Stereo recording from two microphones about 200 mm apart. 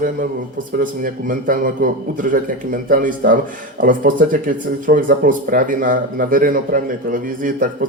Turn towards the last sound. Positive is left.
turn(degrees=-40)  # may be behind; listen again after turning